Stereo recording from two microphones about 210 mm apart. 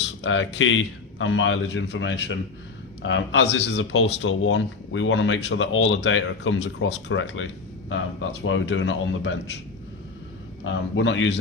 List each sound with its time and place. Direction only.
0.0 s speech: 60° left (ahead or behind)
8.5 s speech: 60° left (ahead or behind)
10.6 s speech: 60° left (ahead or behind)